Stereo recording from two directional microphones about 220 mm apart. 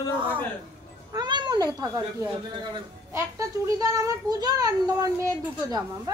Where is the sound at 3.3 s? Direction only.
15° right (ahead or behind).